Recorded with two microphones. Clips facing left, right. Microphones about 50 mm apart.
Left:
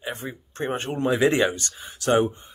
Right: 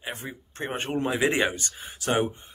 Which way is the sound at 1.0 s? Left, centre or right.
Centre.